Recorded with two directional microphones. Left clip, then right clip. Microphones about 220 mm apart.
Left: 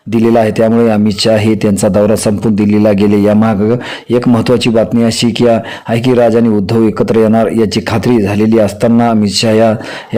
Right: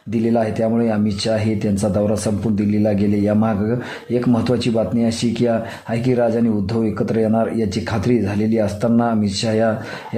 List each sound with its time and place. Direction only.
0.1 s speech: 40° left (ahead or behind)